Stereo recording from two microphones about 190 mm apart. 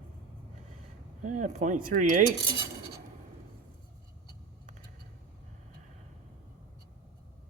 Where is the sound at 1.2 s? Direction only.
40° right (ahead or behind).